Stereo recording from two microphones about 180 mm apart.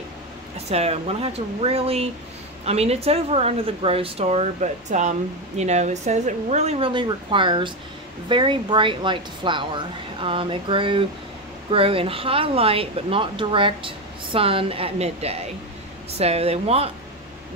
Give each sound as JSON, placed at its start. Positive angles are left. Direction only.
{"t": 0.7, "sound": "a woman's voice", "side_deg": -35}